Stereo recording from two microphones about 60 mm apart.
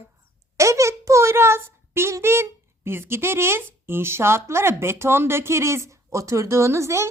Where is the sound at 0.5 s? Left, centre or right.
Right.